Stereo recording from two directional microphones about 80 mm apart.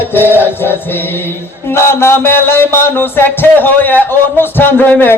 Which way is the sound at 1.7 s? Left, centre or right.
Left.